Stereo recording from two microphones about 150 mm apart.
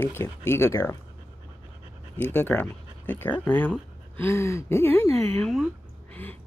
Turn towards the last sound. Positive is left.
turn(degrees=5)  # may be behind; listen again after turning